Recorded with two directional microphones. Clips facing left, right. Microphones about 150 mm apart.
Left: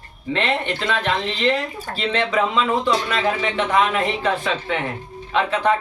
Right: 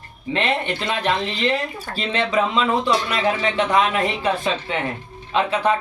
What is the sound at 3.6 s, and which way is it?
A man's voice, 20° right (ahead or behind).